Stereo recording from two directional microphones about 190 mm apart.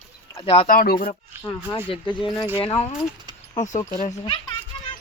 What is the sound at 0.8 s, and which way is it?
Speech, 50° left (ahead or behind).